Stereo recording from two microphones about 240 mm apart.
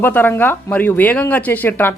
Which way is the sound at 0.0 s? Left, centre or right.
Centre.